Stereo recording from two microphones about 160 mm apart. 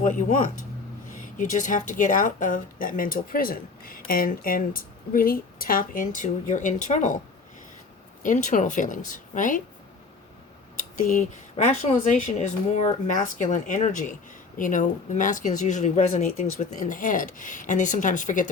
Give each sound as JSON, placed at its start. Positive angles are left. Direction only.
{"t": 0.0, "sound": "speech", "side_deg": 55}
{"t": 8.2, "sound": "speech", "side_deg": 55}
{"t": 10.8, "sound": "speech", "side_deg": 55}